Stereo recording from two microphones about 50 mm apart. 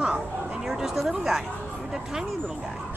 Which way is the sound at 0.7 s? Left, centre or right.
Centre.